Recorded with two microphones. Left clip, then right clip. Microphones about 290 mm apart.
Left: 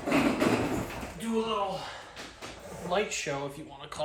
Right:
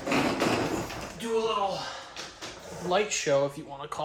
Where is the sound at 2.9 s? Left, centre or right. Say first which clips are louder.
Right 3 dB; right.